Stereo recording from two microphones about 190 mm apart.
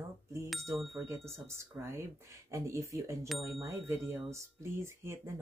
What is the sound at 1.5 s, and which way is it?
Speech, 15° right (ahead or behind).